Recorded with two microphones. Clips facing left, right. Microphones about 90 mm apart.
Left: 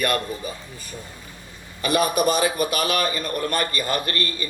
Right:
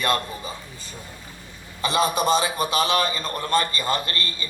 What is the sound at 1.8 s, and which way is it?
A man's voice, 25° right (ahead or behind).